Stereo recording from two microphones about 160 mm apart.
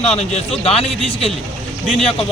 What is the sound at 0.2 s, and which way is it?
Speech, 40° left (ahead or behind).